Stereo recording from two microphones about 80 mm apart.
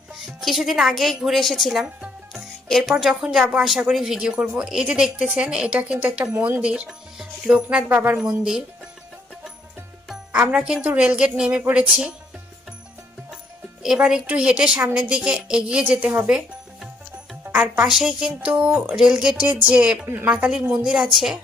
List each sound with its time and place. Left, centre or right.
0.1 s a woman's voice: centre
1.8 s music: centre
2.6 s a woman's voice: centre
8.4 s speech: centre
10.6 s a woman's voice: centre
13.8 s a woman's voice: centre
16.0 s a woman's voice: right
17.4 s music: right
17.8 s a woman's voice: centre
18.9 s a woman's voice: centre
20.1 s a woman's voice: right
20.3 s a woman's voice: centre